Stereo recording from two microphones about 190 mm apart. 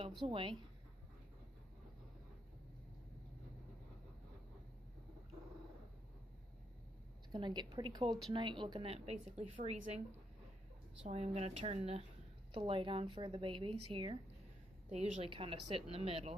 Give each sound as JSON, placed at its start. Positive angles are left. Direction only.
{"t": 0.3, "sound": "a woman's voice", "side_deg": -25}
{"t": 7.3, "sound": "a woman's voice", "side_deg": -25}
{"t": 11.1, "sound": "a woman's voice", "side_deg": -35}